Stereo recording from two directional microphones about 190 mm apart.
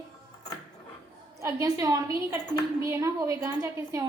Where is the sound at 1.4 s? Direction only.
15° right (ahead or behind).